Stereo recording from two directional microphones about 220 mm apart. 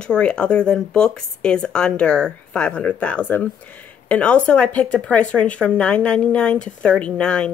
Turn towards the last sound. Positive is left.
turn(degrees=5)  # may be behind; listen again after turning